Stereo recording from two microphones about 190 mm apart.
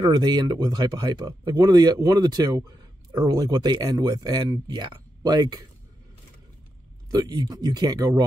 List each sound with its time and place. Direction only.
0.0 s speech: 20° right (ahead or behind)
7.1 s speech: 20° right (ahead or behind)